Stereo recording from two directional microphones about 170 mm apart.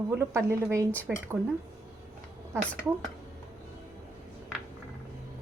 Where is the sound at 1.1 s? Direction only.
5° right (ahead or behind).